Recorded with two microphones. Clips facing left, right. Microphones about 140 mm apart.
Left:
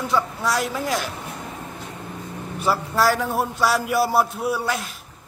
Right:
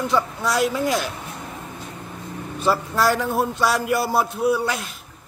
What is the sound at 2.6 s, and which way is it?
A man's voice, 5° left (ahead or behind).